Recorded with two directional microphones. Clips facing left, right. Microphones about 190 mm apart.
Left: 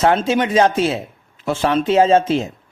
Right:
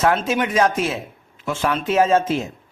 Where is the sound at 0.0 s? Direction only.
30° left (ahead or behind).